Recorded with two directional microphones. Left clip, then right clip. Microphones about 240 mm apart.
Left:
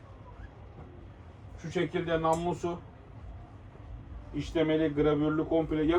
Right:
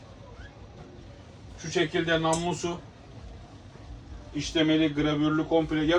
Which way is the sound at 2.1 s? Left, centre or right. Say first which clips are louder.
Right 2 dB; right.